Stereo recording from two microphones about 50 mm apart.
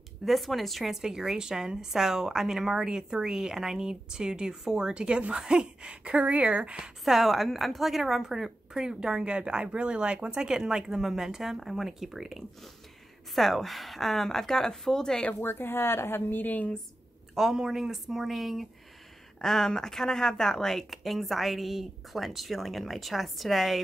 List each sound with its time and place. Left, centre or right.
0.2 s a woman's voice: centre
1.0 s a woman's voice: centre
6.8 s a woman's voice: centre
15.3 s a woman's voice: left
17.4 s a woman's voice: centre
19.4 s a woman's voice: centre